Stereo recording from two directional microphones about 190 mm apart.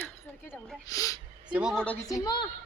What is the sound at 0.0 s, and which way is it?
A woman's voice, 10° left (ahead or behind).